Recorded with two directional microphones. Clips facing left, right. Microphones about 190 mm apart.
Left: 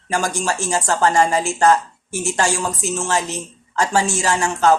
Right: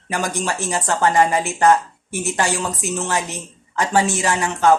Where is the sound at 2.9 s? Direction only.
20° right (ahead or behind).